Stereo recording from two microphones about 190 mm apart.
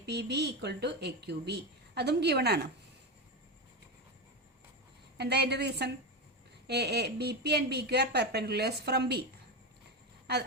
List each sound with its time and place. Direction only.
0.0 s a woman's voice: 60° right (ahead or behind)
5.1 s a woman's voice: 60° right (ahead or behind)